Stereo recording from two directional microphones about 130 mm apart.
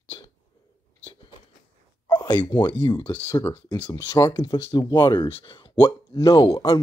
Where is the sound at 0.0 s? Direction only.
45° left (ahead or behind).